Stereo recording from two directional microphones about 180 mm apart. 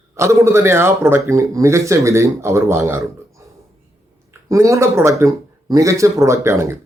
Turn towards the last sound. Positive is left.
turn(degrees=-15)  # may be behind; listen again after turning